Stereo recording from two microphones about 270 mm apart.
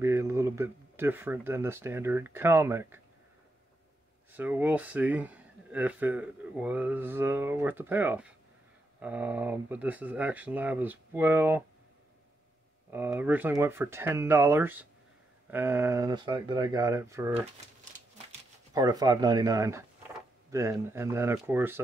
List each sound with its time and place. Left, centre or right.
0.0 s speech: centre
4.3 s speech: centre
12.9 s speech: centre
18.8 s speech: centre